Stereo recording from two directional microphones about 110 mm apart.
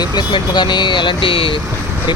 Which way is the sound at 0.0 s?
45° left (ahead or behind).